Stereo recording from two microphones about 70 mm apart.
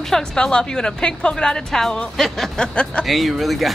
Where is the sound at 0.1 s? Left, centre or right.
Centre.